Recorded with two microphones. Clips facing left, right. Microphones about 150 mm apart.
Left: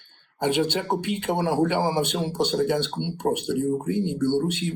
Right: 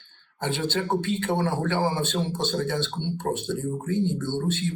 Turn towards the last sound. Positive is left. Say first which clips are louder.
# left 4 dB
turn(degrees=15)  # may be behind; listen again after turning